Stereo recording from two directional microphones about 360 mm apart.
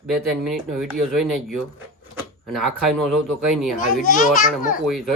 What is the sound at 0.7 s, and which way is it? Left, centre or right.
Speech, centre.